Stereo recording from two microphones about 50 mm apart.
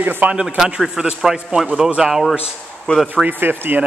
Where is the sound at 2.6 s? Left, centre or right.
Centre.